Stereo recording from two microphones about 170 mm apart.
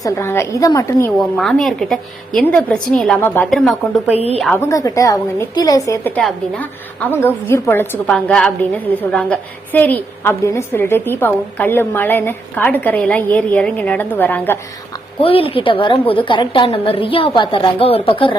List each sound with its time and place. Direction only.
0.0 s a woman's voice: 15° left (ahead or behind)
1.2 s a woman's voice: centre (ahead or behind)
3.5 s a woman's voice: centre (ahead or behind)
4.5 s a woman's voice: 15° left (ahead or behind)
6.1 s a woman's voice: 5° left (ahead or behind)
15.2 s a woman's voice: 35° left (ahead or behind)